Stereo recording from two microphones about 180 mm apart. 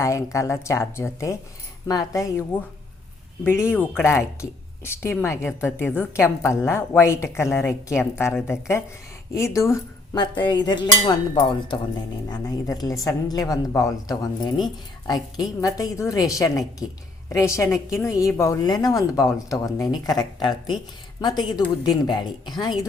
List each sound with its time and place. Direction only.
0.0 s a woman's voice: 15° left (ahead or behind)